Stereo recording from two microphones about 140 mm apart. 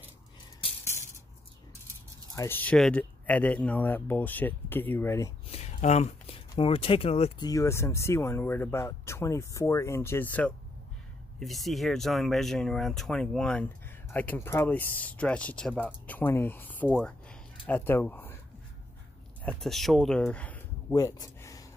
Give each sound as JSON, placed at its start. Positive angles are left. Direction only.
{"t": 2.3, "sound": "speech", "side_deg": 15}
{"t": 5.5, "sound": "a sound", "side_deg": 50}
{"t": 6.6, "sound": "speech", "side_deg": 40}
{"t": 7.3, "sound": "speech", "side_deg": 25}
{"t": 11.3, "sound": "speech", "side_deg": 0}
{"t": 16.9, "sound": "a sound", "side_deg": 5}
{"t": 17.6, "sound": "speech", "side_deg": 15}
{"t": 19.4, "sound": "speech", "side_deg": 0}
{"t": 20.9, "sound": "a sound", "side_deg": 25}